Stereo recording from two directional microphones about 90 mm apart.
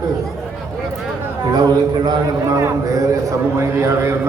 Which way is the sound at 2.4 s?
35° right (ahead or behind).